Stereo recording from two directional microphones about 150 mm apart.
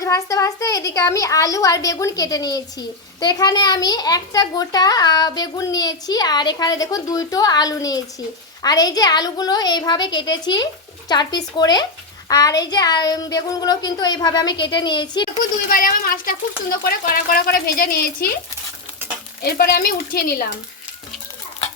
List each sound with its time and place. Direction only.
0.0 s a woman's voice: 20° left (ahead or behind)
15.7 s a woman's voice: 70° left (ahead or behind)
19.4 s a woman's voice: 90° left